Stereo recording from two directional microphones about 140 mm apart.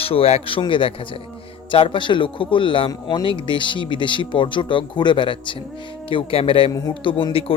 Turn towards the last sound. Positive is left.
turn(degrees=40)  # may be behind; listen again after turning